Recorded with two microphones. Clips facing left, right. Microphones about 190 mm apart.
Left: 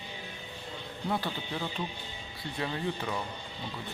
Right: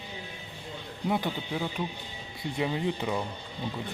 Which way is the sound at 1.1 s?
15° right (ahead or behind).